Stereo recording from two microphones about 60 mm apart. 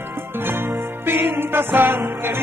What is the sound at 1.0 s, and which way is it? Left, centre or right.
Music, right.